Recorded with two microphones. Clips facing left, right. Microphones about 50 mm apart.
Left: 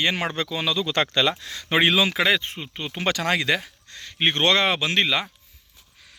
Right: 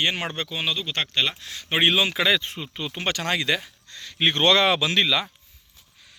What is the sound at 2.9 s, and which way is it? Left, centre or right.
Speech, left.